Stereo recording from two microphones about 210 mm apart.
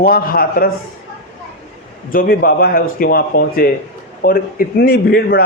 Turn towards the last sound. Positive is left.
turn(degrees=45)  # may be behind; listen again after turning